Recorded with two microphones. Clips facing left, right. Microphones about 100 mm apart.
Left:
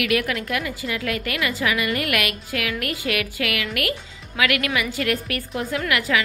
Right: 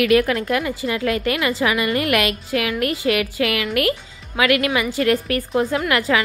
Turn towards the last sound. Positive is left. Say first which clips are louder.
# right 3 dB
turn(degrees=-35)  # may be behind; listen again after turning